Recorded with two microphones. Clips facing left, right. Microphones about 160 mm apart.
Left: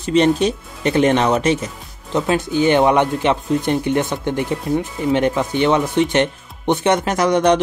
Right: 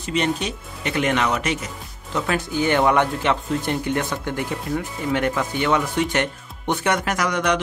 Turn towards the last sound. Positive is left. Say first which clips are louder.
# left 7 dB
turn(degrees=30)  # may be behind; listen again after turning